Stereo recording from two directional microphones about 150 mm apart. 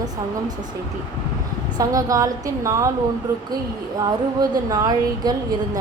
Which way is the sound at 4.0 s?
25° right (ahead or behind).